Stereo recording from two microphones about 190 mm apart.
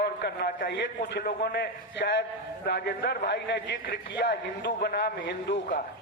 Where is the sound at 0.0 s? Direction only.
60° left (ahead or behind).